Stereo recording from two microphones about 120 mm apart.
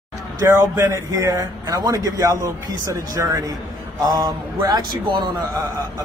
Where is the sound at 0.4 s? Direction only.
25° right (ahead or behind).